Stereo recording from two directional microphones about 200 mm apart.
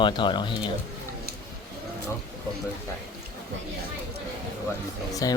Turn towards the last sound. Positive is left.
turn(degrees=20)  # may be behind; listen again after turning